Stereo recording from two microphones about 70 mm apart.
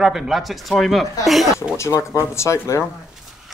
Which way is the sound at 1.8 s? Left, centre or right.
Left.